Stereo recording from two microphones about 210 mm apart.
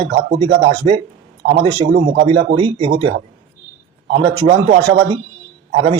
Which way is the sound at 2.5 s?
25° right (ahead or behind).